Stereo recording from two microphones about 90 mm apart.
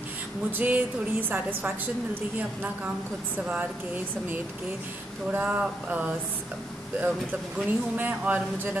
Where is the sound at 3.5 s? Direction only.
20° right (ahead or behind).